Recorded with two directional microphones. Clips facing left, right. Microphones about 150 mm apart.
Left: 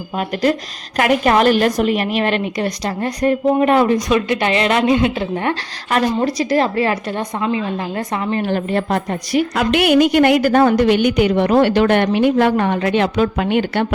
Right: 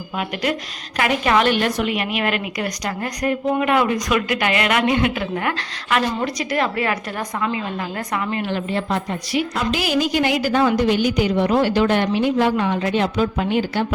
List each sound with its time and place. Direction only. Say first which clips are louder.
0.9 s a woman's voice: left 4 dB; 45° left (ahead or behind)
8.4 s a woman's voice: left 4 dB; 50° left (ahead or behind)
9.6 s a woman's voice: left 9 dB; 65° left (ahead or behind)